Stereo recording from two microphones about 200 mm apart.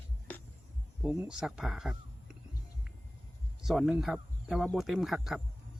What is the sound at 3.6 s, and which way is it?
Speech, centre (ahead or behind).